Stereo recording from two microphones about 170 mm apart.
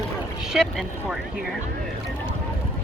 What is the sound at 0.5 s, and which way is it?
Speech, centre (ahead or behind).